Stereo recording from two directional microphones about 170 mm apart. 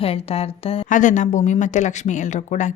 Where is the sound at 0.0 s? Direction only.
35° left (ahead or behind).